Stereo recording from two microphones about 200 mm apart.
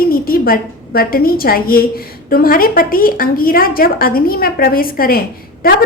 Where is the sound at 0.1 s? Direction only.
50° left (ahead or behind).